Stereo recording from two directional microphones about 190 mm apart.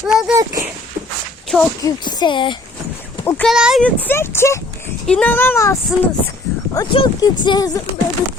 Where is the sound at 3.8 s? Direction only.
10° left (ahead or behind).